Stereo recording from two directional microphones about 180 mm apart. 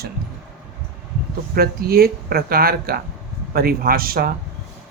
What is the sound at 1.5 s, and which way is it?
Speech, 55° right (ahead or behind).